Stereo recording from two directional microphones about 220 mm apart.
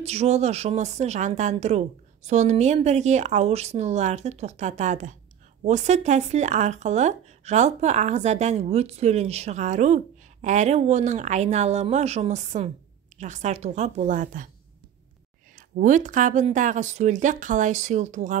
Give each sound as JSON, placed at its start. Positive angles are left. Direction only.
{"t": 0.0, "sound": "speech", "side_deg": -30}
{"t": 15.5, "sound": "speech", "side_deg": -35}